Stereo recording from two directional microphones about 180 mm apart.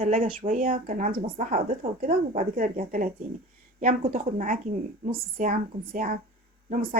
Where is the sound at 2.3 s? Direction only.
50° right (ahead or behind).